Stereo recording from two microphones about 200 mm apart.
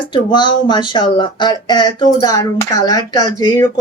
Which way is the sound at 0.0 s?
25° left (ahead or behind).